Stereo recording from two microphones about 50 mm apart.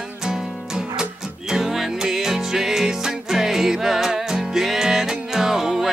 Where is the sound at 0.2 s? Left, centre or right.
Centre.